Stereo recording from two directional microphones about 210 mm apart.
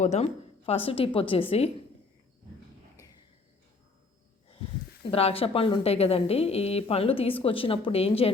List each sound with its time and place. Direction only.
0.0 s a woman's voice: 30° left (ahead or behind)
5.1 s a woman's voice: 25° left (ahead or behind)